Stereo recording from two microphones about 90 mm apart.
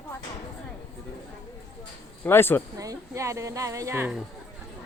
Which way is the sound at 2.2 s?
25° left (ahead or behind).